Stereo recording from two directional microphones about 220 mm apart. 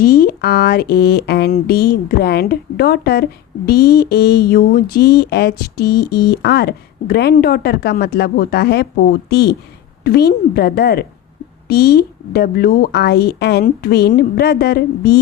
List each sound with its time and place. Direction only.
0.0 s speech: 40° left (ahead or behind)